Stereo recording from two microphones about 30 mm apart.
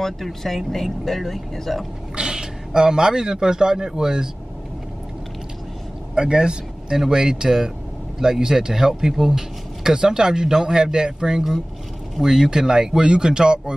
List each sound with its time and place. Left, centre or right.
0.0 s speech: centre
2.1 s a man's voice: right
6.1 s speech: right
12.2 s speech: centre; by 13.7 s right